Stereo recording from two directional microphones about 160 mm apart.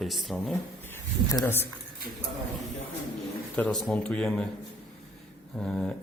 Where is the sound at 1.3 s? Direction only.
15° left (ahead or behind).